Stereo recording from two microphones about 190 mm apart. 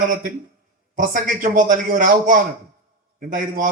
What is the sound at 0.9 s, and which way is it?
A man's voice, 45° right (ahead or behind).